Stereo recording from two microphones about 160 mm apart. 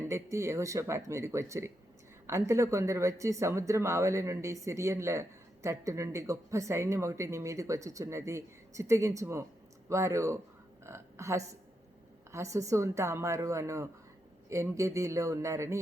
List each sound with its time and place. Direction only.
0.1 s speech: 15° right (ahead or behind)